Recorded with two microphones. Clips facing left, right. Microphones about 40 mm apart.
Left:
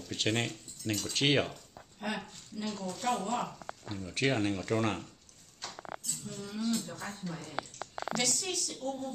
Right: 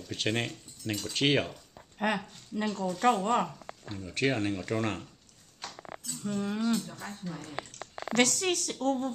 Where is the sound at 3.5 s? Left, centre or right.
Centre.